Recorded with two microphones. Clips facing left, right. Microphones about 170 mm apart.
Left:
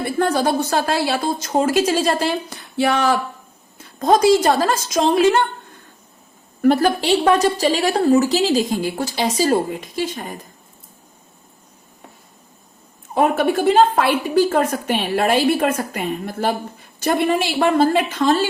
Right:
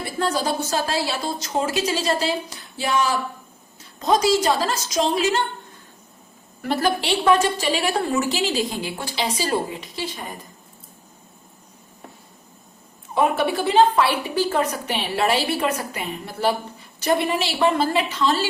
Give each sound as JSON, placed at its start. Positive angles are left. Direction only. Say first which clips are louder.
{"t": 0.0, "sound": "a woman's voice", "louder": "left 5 dB", "side_deg": 55}
{"t": 13.1, "sound": "a woman's voice", "louder": "left 3 dB", "side_deg": 45}